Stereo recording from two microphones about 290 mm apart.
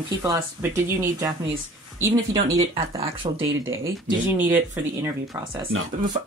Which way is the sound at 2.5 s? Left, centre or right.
Centre.